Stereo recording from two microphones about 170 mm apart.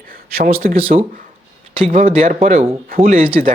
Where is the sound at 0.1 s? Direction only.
60° right (ahead or behind).